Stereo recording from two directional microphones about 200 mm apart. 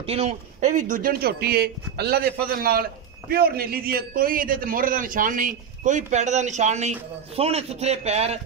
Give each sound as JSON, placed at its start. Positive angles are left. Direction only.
{"t": 0.0, "sound": "speech", "side_deg": -30}